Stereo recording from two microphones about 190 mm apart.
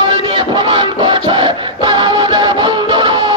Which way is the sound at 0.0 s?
25° right (ahead or behind).